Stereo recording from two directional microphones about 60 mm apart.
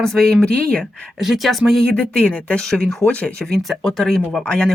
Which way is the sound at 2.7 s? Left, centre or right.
Centre.